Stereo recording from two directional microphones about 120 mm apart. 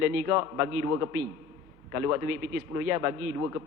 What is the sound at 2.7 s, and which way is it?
Speech, 25° right (ahead or behind).